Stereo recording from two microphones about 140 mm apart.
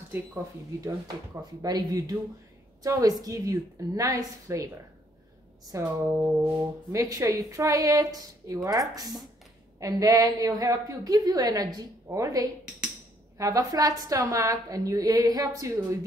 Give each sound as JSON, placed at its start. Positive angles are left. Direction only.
{"t": 0.7, "sound": "a woman's voice", "side_deg": -25}
{"t": 5.7, "sound": "a woman's voice", "side_deg": -20}